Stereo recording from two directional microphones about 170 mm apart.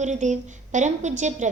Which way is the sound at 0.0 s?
45° right (ahead or behind).